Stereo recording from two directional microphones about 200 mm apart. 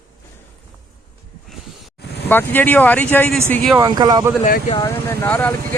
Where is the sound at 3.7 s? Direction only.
20° right (ahead or behind).